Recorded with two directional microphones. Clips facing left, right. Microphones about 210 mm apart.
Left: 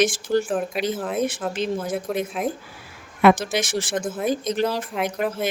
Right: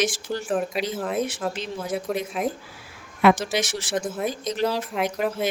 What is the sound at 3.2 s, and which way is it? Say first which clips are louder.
Speech: left 2 dB; 50° left (ahead or behind).